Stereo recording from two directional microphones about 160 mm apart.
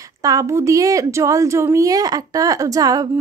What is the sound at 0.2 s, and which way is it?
A woman's voice, 20° right (ahead or behind).